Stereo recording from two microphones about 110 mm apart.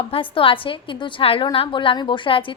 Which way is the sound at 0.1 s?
55° left (ahead or behind).